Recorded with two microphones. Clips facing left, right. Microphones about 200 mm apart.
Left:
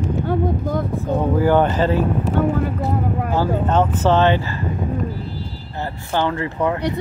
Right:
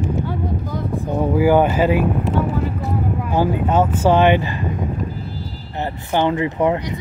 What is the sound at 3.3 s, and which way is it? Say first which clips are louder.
Speech: right 2 dB; 10° right (ahead or behind).